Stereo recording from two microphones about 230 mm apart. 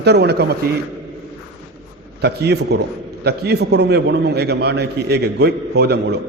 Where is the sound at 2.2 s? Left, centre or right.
Right.